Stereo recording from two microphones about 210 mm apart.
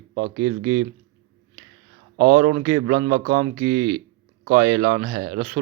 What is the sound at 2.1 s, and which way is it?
A man's voice, 45° right (ahead or behind).